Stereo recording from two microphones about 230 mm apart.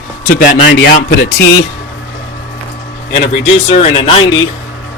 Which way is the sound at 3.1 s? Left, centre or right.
Left.